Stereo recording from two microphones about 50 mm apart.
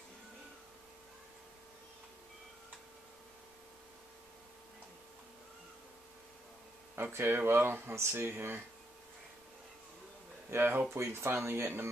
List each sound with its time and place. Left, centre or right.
7.0 s speech: right
10.5 s speech: right
11.1 s speech: right